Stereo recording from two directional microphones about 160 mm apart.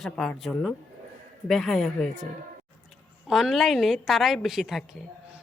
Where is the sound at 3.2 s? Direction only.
Centre (ahead or behind).